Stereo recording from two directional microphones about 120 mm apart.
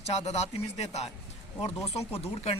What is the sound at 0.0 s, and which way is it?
Speech, 65° left (ahead or behind).